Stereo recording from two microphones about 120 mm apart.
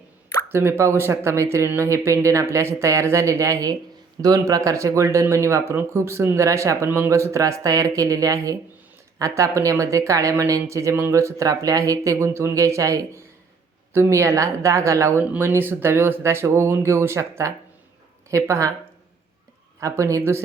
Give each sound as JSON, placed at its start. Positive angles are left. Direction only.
{"t": 0.5, "sound": "speech", "side_deg": -20}
{"t": 19.8, "sound": "speech", "side_deg": -25}